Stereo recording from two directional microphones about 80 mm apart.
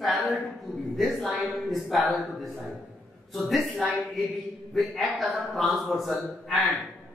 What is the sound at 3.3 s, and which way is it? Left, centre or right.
A man's voice, centre.